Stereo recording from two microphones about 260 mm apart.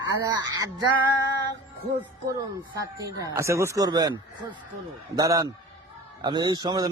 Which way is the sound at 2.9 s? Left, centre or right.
Centre.